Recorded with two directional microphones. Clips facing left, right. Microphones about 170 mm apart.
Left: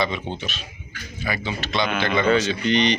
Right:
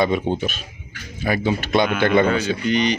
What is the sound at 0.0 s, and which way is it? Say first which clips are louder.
A man's voice: right 6 dB; 50° right (ahead or behind).